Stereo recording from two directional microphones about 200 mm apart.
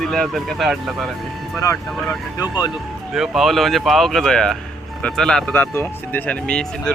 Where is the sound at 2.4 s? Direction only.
20° left (ahead or behind).